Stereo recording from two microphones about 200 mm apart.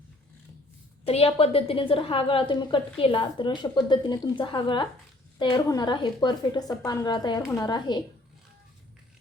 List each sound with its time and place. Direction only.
1.0 s a woman's voice: 30° left (ahead or behind)